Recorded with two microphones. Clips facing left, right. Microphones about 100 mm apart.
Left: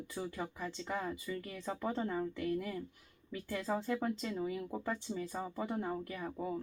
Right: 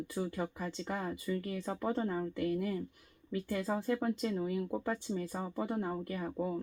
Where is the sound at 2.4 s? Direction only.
5° right (ahead or behind).